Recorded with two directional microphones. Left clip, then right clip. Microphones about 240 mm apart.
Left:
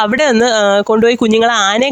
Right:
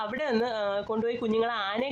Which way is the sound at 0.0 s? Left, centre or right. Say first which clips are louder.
Left 17 dB; left.